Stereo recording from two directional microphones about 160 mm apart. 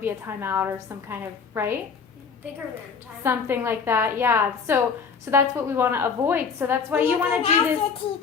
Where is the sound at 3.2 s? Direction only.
15° right (ahead or behind).